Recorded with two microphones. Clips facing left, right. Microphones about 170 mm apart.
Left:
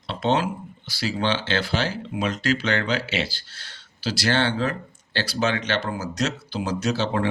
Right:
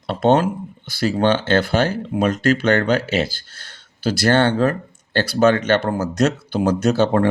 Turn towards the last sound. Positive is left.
turn(degrees=-50)  # may be behind; listen again after turning